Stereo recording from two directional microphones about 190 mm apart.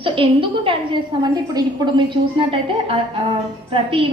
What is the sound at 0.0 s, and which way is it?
A woman's voice, 30° right (ahead or behind).